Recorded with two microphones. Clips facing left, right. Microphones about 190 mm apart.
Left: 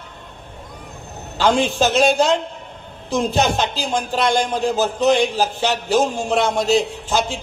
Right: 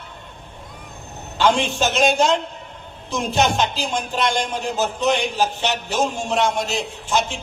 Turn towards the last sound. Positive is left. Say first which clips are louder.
# left 1 dB
turn(degrees=35)  # may be behind; listen again after turning